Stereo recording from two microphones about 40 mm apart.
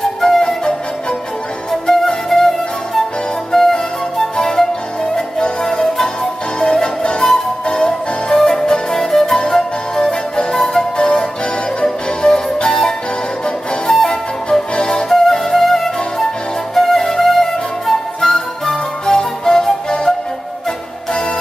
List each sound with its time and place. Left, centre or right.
1.7 s flute: centre
5.4 s music: centre
7.2 s music: centre
7.6 s music: left
8.3 s music: centre
9.5 s flute: centre
10.5 s music: centre
11.0 s music: centre
13.8 s flute: centre
14.8 s music: centre
16.7 s flute: centre